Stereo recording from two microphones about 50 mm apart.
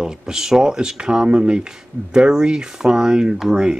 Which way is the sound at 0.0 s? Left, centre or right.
Centre.